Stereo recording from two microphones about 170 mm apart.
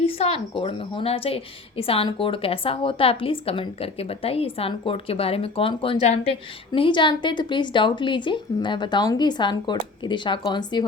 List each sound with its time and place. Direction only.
0.0 s a woman's voice: 35° left (ahead or behind)